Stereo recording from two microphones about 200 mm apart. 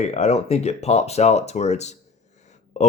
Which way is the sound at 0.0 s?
35° left (ahead or behind).